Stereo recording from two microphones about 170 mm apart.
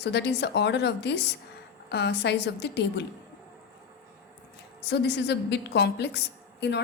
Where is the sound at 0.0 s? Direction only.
85° left.